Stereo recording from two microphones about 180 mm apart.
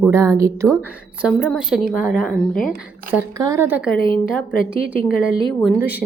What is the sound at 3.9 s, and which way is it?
Speech, 50° left (ahead or behind).